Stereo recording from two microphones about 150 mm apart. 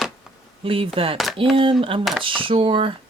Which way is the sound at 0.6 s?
40° right (ahead or behind).